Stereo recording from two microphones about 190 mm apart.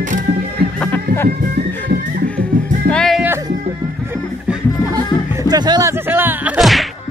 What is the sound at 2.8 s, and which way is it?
Music, centre (ahead or behind).